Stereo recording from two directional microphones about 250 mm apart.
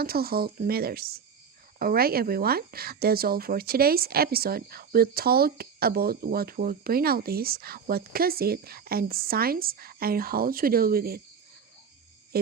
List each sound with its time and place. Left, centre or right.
0.0 s speech: right